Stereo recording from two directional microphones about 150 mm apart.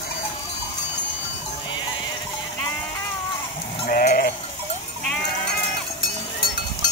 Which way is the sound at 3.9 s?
80° left.